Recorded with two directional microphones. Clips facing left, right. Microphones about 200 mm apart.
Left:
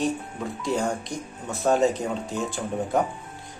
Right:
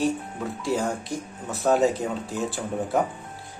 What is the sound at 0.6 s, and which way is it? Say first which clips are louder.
Speech: even; 5° right (ahead or behind).